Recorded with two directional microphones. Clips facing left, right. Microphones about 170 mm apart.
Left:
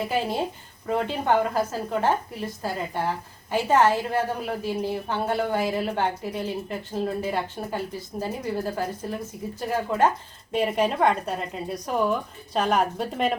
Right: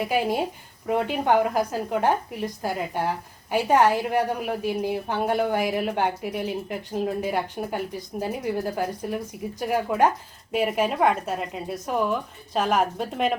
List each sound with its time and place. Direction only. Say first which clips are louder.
0.0 s a woman's voice: right 2 dB; 15° right (ahead or behind)